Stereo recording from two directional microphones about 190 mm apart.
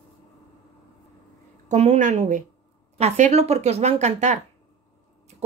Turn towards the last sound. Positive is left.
turn(degrees=-35)  # may be behind; listen again after turning